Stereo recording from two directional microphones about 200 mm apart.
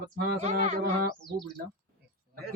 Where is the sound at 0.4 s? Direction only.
35° right (ahead or behind).